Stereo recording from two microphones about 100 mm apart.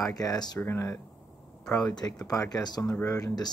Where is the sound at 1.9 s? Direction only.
40° left (ahead or behind).